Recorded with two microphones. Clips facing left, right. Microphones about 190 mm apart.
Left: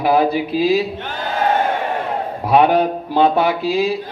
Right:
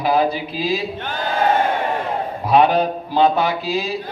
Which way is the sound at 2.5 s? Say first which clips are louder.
Left 2 dB; 55° left (ahead or behind).